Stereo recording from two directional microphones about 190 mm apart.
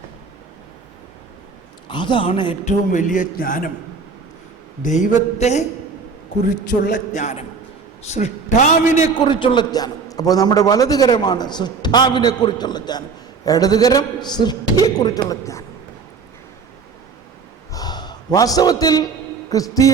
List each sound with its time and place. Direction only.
1.9 s a man's voice: 25° left (ahead or behind)
2.9 s a man's voice: 45° left (ahead or behind)
4.8 s a man's voice: 40° left (ahead or behind)
6.8 s a man's voice: 40° left (ahead or behind)
9.2 s a man's voice: 25° left (ahead or behind)
17.7 s a sound: 20° left (ahead or behind)
19.5 s a man's voice: 20° left (ahead or behind)